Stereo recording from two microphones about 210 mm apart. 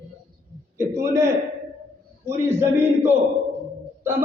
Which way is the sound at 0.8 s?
15° right (ahead or behind).